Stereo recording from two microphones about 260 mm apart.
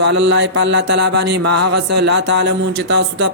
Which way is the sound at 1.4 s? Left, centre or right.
Right.